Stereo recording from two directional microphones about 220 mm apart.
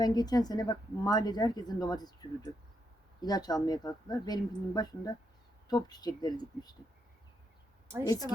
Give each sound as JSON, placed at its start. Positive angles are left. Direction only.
{"t": 0.0, "sound": "a woman's voice", "side_deg": 15}
{"t": 8.0, "sound": "a woman's voice", "side_deg": 15}